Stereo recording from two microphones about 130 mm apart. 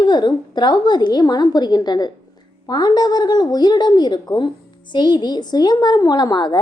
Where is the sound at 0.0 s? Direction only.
35° left (ahead or behind).